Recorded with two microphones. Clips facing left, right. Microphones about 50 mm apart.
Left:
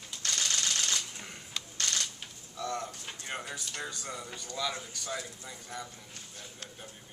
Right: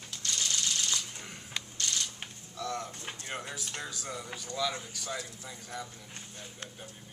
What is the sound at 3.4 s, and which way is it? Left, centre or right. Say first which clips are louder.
Speech: left 1 dB; centre.